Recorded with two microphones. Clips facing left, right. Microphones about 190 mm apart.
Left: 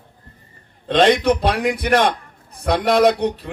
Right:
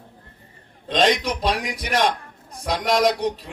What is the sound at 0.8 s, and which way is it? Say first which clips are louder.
A man's voice: left 6 dB; 60° left (ahead or behind).